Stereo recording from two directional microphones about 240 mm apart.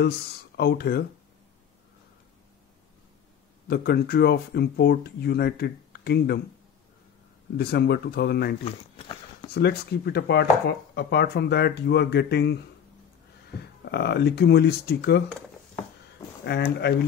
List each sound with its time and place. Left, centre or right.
0.6 s speech: left
3.6 s speech: left
7.5 s speech: left
8.6 s speech: left
9.5 s speech: left
16.4 s speech: left